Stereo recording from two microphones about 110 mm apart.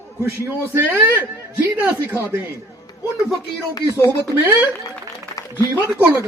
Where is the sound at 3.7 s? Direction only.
30° left (ahead or behind).